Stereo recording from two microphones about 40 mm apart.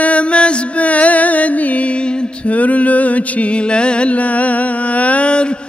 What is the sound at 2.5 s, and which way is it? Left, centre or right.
Mantra, left.